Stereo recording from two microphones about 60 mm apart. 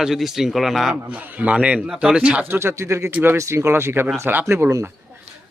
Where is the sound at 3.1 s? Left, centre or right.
Right.